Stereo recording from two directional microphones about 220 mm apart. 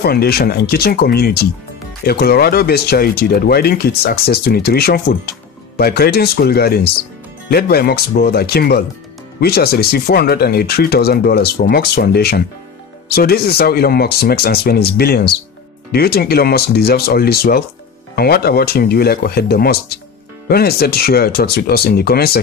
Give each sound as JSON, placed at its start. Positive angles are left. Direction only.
{"t": 0.0, "sound": "speech", "side_deg": 45}